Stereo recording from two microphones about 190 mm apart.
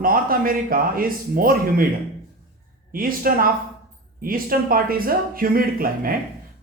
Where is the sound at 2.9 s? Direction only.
50° right (ahead or behind).